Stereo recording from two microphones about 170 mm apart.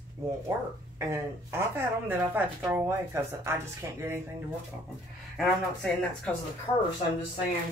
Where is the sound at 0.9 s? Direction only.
15° right (ahead or behind).